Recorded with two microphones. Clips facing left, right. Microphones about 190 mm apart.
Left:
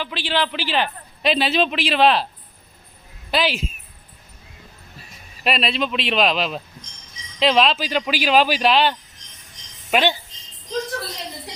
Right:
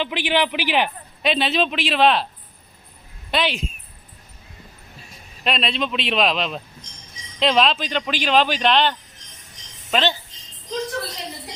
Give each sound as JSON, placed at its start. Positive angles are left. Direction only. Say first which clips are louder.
{"t": 0.0, "sound": "speech", "louder": "right 2 dB", "side_deg": -15}
{"t": 1.2, "sound": "speech", "louder": "left 1 dB", "side_deg": 0}
{"t": 3.3, "sound": "speech", "louder": "left 1 dB", "side_deg": 0}
{"t": 5.4, "sound": "a woman's voice", "louder": "left 2 dB", "side_deg": 5}